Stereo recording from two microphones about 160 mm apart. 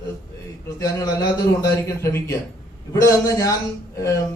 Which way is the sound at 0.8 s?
25° left (ahead or behind).